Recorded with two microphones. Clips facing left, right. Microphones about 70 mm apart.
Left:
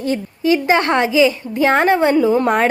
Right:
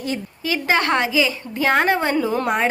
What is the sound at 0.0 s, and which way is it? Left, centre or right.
Speech, left.